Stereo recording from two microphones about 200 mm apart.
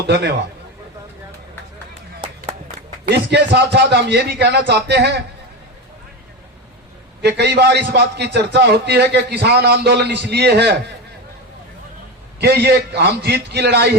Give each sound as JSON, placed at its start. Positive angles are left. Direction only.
{"t": 0.1, "sound": "a man's voice", "side_deg": -60}
{"t": 3.1, "sound": "a man's voice", "side_deg": -60}
{"t": 7.2, "sound": "a man's voice", "side_deg": -55}
{"t": 12.4, "sound": "a man's voice", "side_deg": -55}